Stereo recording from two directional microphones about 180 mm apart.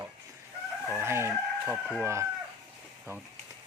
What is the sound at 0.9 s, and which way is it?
Chicken, 10° right (ahead or behind).